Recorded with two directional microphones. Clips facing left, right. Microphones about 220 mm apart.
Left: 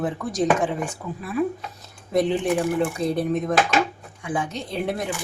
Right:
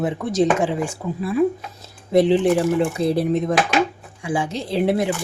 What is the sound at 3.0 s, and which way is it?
Speech, 30° right (ahead or behind).